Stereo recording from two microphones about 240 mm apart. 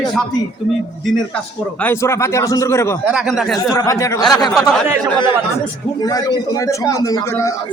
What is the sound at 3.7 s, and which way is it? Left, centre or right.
Speech, centre.